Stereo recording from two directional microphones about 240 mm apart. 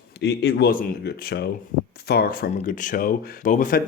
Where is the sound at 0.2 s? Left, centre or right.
Left.